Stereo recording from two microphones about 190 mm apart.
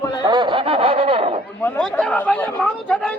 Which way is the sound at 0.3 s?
25° right (ahead or behind).